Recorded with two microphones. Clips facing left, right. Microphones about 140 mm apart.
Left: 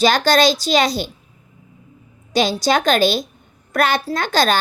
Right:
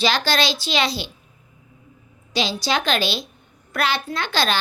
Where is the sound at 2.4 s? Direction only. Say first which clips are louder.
Left 6 dB; 45° left (ahead or behind).